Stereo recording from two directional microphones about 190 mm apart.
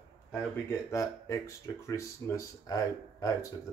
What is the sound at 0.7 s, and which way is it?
Speech, 15° left (ahead or behind).